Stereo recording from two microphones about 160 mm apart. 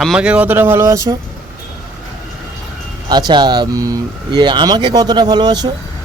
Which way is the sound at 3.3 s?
25° right (ahead or behind).